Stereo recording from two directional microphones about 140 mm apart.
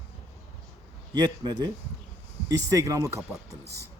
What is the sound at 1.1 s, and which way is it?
Speech, 30° right (ahead or behind).